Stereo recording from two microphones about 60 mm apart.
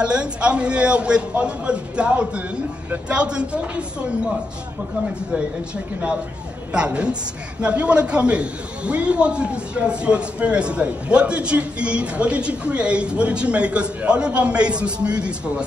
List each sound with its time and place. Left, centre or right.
0.0 s a man's voice: centre
6.7 s a man's voice: centre